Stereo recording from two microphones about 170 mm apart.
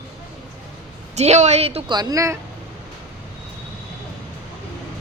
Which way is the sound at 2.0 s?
20° right (ahead or behind).